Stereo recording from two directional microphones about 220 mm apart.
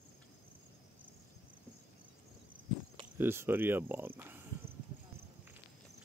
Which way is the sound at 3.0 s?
10° right (ahead or behind).